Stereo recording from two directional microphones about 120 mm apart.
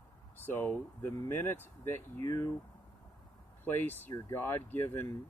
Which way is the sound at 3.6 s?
15° left (ahead or behind).